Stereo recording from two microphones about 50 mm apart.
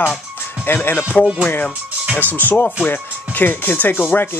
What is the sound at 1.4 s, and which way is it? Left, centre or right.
Speech, left.